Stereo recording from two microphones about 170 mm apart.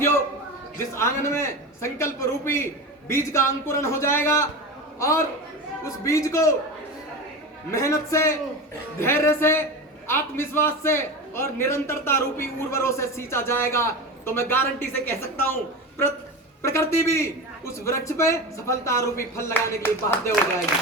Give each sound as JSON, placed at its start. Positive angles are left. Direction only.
{"t": 0.9, "sound": "a man's voice", "side_deg": 15}
{"t": 7.7, "sound": "a man's voice", "side_deg": 15}
{"t": 16.6, "sound": "a man's voice", "side_deg": 15}